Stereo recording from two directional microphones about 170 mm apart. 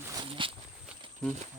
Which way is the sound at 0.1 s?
25° right (ahead or behind).